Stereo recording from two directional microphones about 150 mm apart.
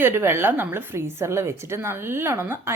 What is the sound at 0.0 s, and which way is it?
A woman's voice, 15° right (ahead or behind).